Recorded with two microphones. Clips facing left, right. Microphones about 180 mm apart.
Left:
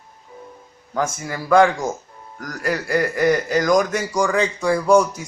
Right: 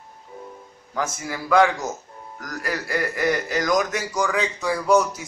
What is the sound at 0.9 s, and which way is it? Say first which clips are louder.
A man's voice: left 4 dB; 50° left (ahead or behind).